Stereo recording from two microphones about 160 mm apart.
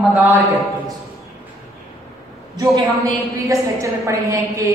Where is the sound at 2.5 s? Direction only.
20° right (ahead or behind).